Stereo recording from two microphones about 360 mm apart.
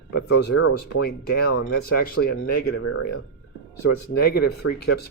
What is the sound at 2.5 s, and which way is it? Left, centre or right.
Speech, left.